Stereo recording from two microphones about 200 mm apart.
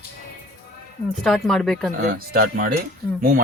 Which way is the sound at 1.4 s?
Centre (ahead or behind).